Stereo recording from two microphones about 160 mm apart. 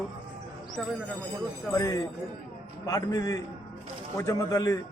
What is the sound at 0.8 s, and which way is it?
Speech, 5° left (ahead or behind).